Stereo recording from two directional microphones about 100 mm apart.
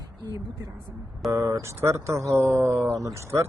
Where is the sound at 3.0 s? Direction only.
30° right (ahead or behind).